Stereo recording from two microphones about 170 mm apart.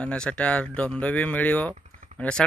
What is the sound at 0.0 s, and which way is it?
Speech, 5° left (ahead or behind).